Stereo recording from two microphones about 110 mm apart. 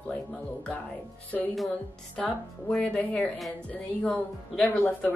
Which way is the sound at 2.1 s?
10° left (ahead or behind).